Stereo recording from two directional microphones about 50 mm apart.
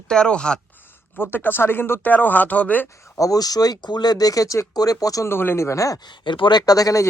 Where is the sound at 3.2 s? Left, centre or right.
Left.